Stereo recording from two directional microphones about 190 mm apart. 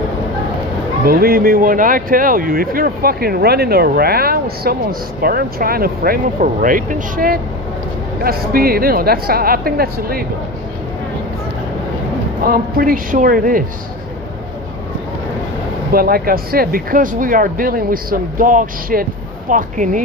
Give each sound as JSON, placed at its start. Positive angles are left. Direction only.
{"t": 1.0, "sound": "speech", "side_deg": -50}
{"t": 12.5, "sound": "speech", "side_deg": -50}
{"t": 15.9, "sound": "speech", "side_deg": -50}